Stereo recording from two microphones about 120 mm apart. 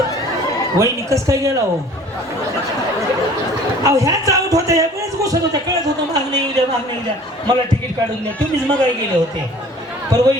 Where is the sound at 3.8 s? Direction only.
30° right (ahead or behind).